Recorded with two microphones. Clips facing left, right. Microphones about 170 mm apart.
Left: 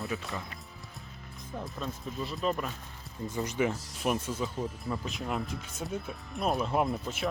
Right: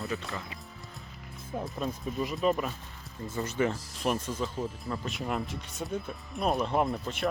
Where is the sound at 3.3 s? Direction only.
15° left (ahead or behind).